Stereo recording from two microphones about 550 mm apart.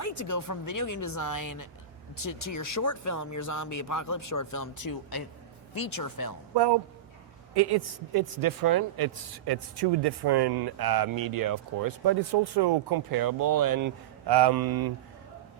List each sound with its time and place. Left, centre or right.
0.0 s speech: left
6.5 s a woman's voice: right